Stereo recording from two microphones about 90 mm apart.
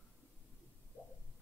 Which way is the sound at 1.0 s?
20° right (ahead or behind).